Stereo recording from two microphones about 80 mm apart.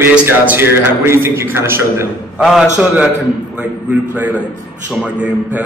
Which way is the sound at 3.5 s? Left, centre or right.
Centre.